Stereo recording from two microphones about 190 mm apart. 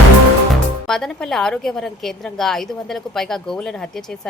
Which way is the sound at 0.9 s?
5° left (ahead or behind).